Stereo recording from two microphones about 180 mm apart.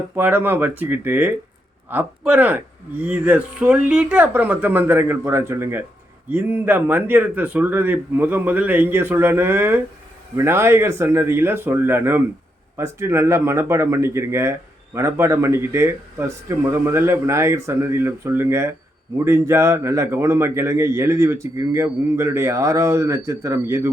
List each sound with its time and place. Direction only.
0.2 s a man's voice: 10° right (ahead or behind)